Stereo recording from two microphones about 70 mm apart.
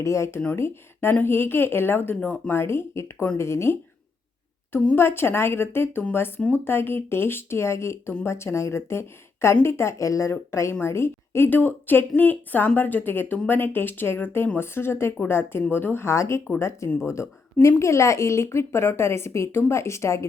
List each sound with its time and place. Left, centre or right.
0.0 s a woman's voice: left
2.6 s a woman's voice: left
4.9 s a woman's voice: left